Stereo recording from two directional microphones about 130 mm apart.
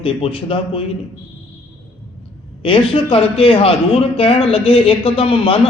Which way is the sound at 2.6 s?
40° left (ahead or behind).